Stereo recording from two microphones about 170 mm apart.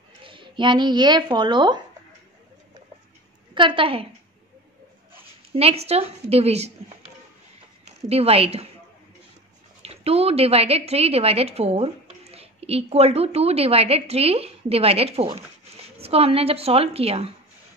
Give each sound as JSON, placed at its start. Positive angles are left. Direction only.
{"t": 0.2, "sound": "speech", "side_deg": -30}
{"t": 3.5, "sound": "a woman's voice", "side_deg": -30}
{"t": 5.5, "sound": "a woman's voice", "side_deg": -35}
{"t": 8.1, "sound": "a woman's voice", "side_deg": -35}
{"t": 9.8, "sound": "a woman's voice", "side_deg": -35}